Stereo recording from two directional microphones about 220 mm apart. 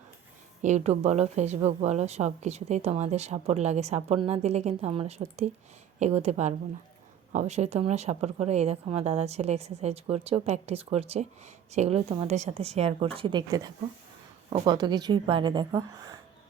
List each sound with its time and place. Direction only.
0.6 s a woman's voice: 30° right (ahead or behind)